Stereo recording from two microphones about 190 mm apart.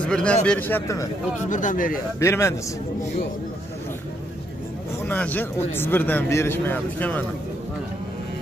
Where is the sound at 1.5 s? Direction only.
45° left (ahead or behind).